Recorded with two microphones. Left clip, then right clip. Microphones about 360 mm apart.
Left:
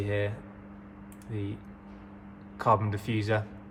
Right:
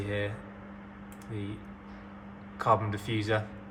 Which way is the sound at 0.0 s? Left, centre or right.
Left.